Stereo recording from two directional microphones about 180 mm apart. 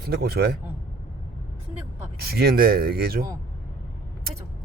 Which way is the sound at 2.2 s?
60° right (ahead or behind).